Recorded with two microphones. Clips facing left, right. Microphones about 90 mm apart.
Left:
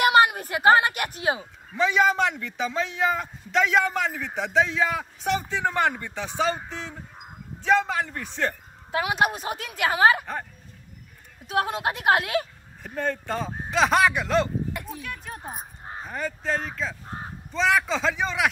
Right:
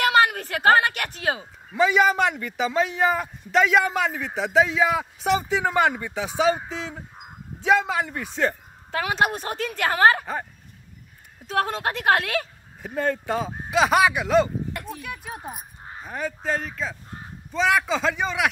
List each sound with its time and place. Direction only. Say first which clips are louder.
0.0 s a sound: left 1 dB; 20° left (ahead or behind)
1.8 s a man's voice: right 2 dB; 5° right (ahead or behind)
8.9 s a woman's voice: right 1 dB; 15° left (ahead or behind)
11.4 s a woman's voice: right 1 dB; 10° left (ahead or behind)
12.8 s a man's voice: right 3 dB; 5° right (ahead or behind)